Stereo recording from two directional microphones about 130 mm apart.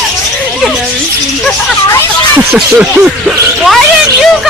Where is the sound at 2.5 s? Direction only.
10° right (ahead or behind).